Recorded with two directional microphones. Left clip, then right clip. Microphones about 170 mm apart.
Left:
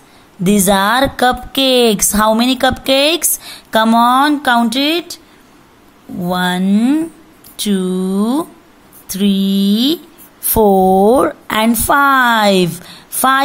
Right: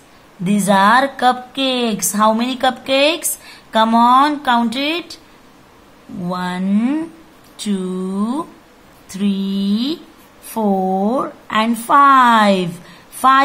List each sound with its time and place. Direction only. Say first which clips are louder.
0.4 s speech: left 1 dB; 40° left (ahead or behind)
6.2 s speech: left 6 dB; 30° left (ahead or behind)
10.5 s speech: left 8 dB; 50° left (ahead or behind)
11.7 s speech: right 2 dB; 35° left (ahead or behind)